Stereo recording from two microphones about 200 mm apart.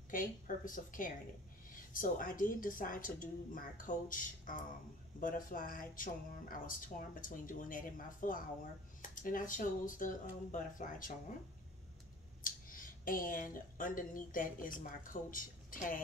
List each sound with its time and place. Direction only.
0.1 s speech: 40° left (ahead or behind)
12.4 s speech: 45° left (ahead or behind)